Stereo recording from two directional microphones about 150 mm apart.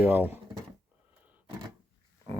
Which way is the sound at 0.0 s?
10° right (ahead or behind).